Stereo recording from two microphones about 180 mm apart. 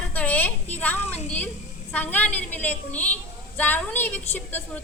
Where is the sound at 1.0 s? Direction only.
35° left (ahead or behind).